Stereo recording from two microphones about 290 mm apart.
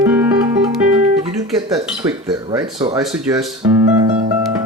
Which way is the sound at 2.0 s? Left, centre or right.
Centre.